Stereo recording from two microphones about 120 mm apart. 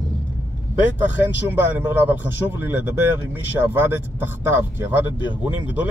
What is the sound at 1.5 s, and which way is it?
A man's voice, 15° right (ahead or behind).